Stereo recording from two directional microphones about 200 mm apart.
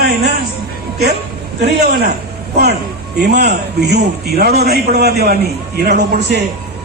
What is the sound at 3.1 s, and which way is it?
A man's voice, 55° right (ahead or behind).